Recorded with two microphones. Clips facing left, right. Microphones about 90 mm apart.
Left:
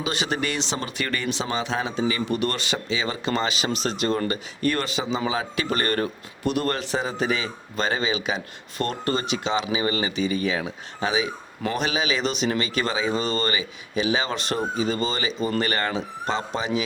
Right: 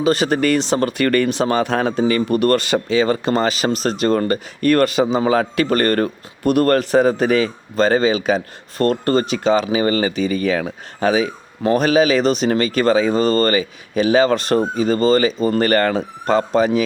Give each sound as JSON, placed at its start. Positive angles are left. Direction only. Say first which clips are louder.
{"t": 0.0, "sound": "speech", "louder": "right 10 dB", "side_deg": -45}